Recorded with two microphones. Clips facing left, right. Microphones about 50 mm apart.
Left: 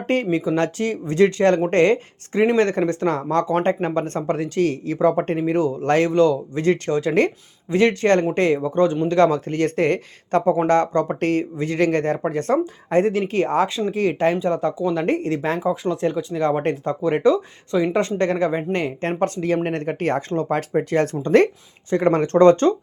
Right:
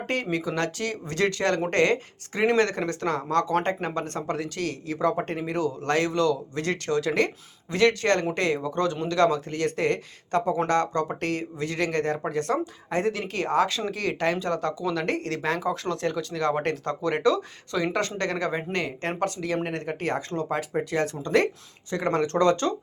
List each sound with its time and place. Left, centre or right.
0.1 s speech: left
4.9 s speech: left
5.2 s speech: left